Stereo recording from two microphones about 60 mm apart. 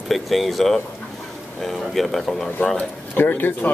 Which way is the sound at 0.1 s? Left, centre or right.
Centre.